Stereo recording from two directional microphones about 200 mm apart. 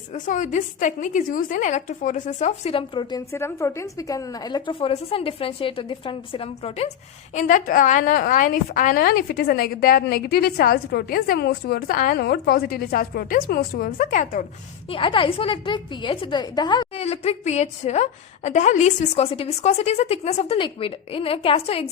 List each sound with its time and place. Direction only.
0.1 s a woman's voice: 40° left (ahead or behind)
14.8 s a woman's voice: 25° left (ahead or behind)